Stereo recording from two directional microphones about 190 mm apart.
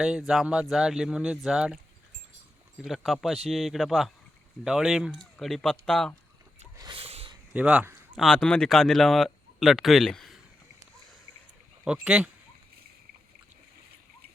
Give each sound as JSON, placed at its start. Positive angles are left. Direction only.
{"t": 0.0, "sound": "speech", "side_deg": 0}
{"t": 6.7, "sound": "a sound", "side_deg": -25}
{"t": 7.5, "sound": "speech", "side_deg": -5}
{"t": 12.0, "sound": "speech", "side_deg": -5}